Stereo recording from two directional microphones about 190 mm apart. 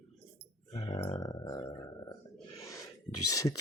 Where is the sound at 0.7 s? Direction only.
20° left (ahead or behind).